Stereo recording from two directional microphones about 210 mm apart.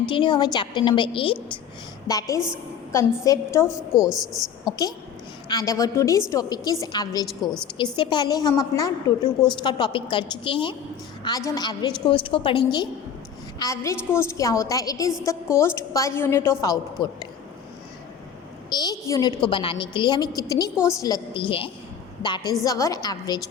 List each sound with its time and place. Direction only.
0.1 s a woman's voice: 25° left (ahead or behind)
3.9 s a woman's voice: centre (ahead or behind)
5.5 s a woman's voice: 15° left (ahead or behind)
18.7 s a woman's voice: 20° left (ahead or behind)